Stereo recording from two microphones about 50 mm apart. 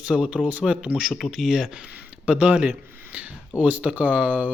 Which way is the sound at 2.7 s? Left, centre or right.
Right.